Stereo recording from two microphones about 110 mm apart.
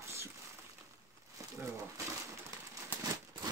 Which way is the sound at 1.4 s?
30° right (ahead or behind).